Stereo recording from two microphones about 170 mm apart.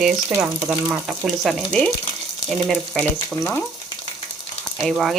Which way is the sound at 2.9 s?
Centre (ahead or behind).